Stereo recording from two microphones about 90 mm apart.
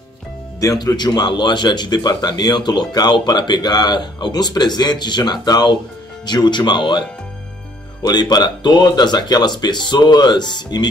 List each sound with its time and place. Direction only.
0.6 s speech: 40° left (ahead or behind)